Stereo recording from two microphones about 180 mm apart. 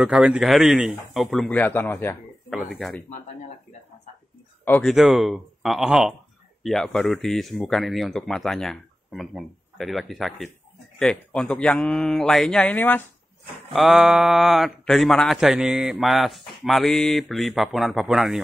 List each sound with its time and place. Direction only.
0.0 s a man's voice: 5° right (ahead or behind); by 2.1 s 10° left (ahead or behind)
2.5 s speech: centre (ahead or behind)
4.6 s speech: 10° left (ahead or behind)
4.9 s a man's voice: centre (ahead or behind)
13.7 s a man's voice: centre (ahead or behind)